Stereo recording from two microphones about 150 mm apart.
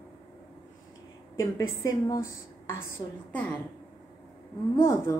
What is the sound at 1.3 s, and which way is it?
Speech, 25° left (ahead or behind).